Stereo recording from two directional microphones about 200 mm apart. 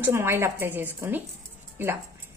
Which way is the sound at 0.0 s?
10° right (ahead or behind).